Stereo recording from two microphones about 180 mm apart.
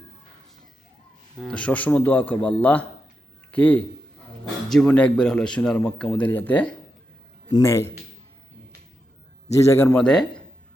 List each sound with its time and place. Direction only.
1.4 s speech: 5° left (ahead or behind)
9.5 s speech: 15° left (ahead or behind)